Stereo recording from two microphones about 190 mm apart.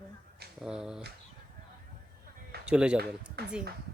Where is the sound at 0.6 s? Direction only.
5° right (ahead or behind).